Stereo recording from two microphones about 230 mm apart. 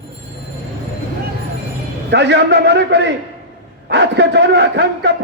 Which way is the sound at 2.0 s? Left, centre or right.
Right.